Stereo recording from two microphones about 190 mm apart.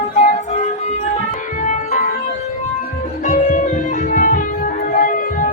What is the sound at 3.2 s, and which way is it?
Music, 40° left (ahead or behind).